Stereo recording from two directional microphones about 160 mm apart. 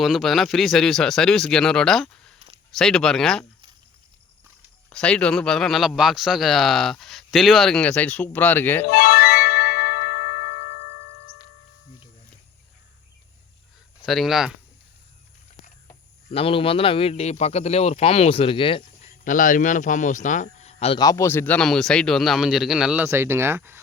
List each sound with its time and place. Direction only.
0.0 s a man's voice: centre (ahead or behind)
4.9 s a man's voice: 5° left (ahead or behind)
8.9 s music: 65° left (ahead or behind); by 11.0 s 90° left
14.0 s a man's voice: centre (ahead or behind)
16.3 s a man's voice: 35° left (ahead or behind)
19.2 s speech: 55° left (ahead or behind)
21.0 s a man's voice: 20° left (ahead or behind); by 23.8 s 15° right (ahead or behind)